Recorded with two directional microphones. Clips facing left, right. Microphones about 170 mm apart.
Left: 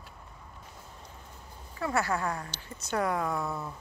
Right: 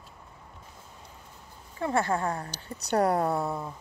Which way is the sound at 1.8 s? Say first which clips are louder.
Right 3 dB; 30° right (ahead or behind).